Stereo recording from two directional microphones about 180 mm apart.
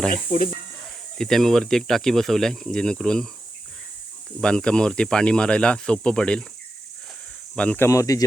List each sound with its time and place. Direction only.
0.1 s speech: 50° left (ahead or behind)
1.2 s speech: centre (ahead or behind)
4.4 s speech: 5° left (ahead or behind)
7.5 s speech: 5° left (ahead or behind)